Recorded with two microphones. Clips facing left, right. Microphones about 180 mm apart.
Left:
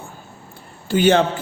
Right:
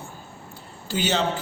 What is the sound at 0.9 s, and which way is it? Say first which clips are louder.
Speech: left 10 dB; 55° left (ahead or behind).